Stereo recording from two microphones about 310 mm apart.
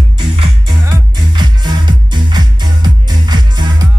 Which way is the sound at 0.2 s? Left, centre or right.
Centre.